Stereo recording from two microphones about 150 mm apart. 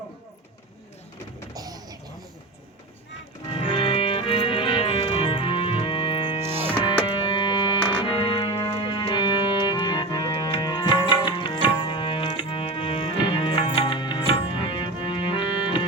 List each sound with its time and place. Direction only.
1.5 s vehicle: 25° right (ahead or behind)
3.5 s music: 40° left (ahead or behind)